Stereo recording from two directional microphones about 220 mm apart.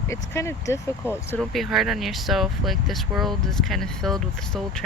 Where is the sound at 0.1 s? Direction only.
10° left (ahead or behind).